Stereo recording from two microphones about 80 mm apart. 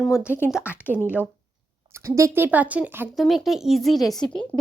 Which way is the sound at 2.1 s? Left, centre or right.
Right.